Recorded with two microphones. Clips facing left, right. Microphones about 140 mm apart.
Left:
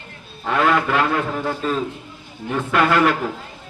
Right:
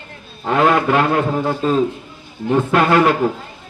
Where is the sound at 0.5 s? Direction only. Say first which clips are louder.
Right 4 dB; 25° right (ahead or behind).